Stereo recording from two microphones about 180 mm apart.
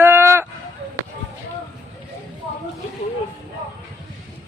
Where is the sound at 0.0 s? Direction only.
15° right (ahead or behind).